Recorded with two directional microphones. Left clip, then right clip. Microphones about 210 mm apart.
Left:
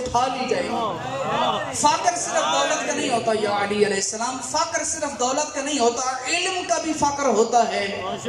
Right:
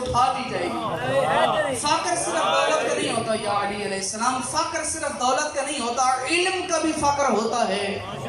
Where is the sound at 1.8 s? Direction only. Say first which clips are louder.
Left 3 dB; 35° left (ahead or behind).